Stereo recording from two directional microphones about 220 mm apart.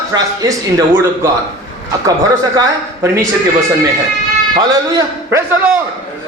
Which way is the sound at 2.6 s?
15° right (ahead or behind).